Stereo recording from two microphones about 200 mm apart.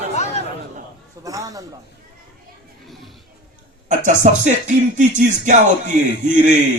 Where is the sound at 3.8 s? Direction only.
40° right (ahead or behind).